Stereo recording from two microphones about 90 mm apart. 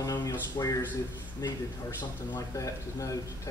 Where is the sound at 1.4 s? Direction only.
40° left (ahead or behind).